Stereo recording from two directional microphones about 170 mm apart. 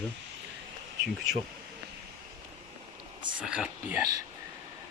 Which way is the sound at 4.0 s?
20° right (ahead or behind).